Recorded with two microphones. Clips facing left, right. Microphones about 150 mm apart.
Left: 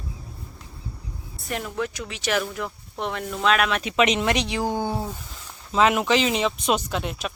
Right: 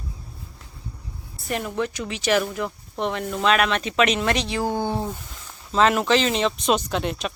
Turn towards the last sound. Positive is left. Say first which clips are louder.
# right 3 dB
turn(degrees=5)  # may be behind; listen again after turning